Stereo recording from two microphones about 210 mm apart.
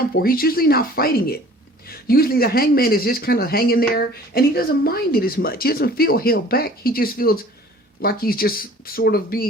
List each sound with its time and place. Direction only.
0.2 s speech: 45° left (ahead or behind)